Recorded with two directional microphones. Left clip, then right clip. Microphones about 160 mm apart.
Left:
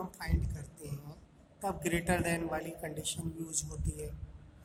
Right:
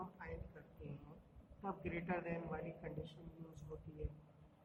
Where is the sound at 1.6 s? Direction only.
90° left.